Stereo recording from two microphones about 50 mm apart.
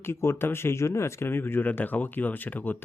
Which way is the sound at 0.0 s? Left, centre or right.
Left.